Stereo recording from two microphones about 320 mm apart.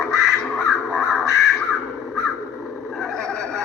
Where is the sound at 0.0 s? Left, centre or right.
Centre.